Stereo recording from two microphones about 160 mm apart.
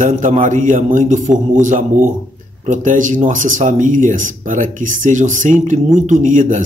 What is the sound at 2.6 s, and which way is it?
Speech, 50° right (ahead or behind).